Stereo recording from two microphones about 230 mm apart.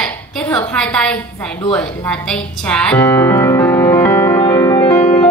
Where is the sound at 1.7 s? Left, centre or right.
Centre.